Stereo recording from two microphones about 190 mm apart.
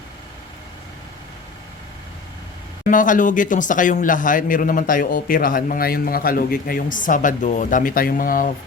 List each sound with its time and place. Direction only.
2.9 s a man's voice: 45° left (ahead or behind)